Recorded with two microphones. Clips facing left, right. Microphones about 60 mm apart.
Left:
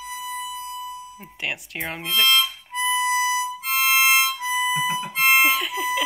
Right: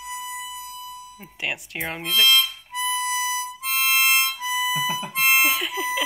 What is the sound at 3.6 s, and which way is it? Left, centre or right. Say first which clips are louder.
Harmonica: left 1 dB; centre.